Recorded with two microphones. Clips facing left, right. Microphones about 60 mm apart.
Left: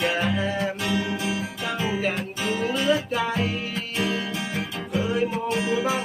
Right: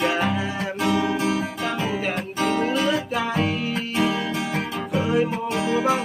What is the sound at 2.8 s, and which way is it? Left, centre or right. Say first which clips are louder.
Music: even; centre.